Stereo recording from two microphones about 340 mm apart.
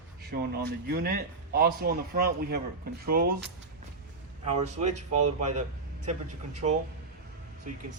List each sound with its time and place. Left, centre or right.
0.3 s a man's voice: right